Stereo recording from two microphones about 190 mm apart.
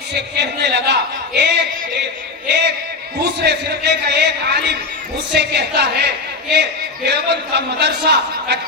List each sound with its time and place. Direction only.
0.1 s speech: 65° right (ahead or behind)